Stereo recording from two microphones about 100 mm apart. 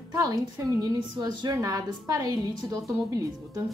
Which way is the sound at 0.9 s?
45° right (ahead or behind).